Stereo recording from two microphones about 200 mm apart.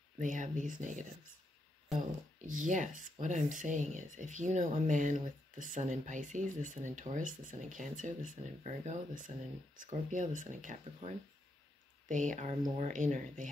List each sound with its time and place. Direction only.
0.2 s speech: 40° right (ahead or behind)
2.6 s speech: 40° right (ahead or behind)